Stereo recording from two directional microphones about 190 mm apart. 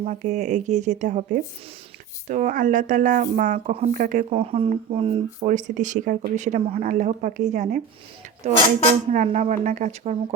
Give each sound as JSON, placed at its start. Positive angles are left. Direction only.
{"t": 0.0, "sound": "speech", "side_deg": -40}
{"t": 2.2, "sound": "speech", "side_deg": -40}